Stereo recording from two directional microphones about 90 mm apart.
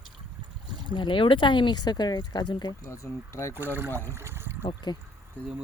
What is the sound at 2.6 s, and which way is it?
Speech, 35° left (ahead or behind).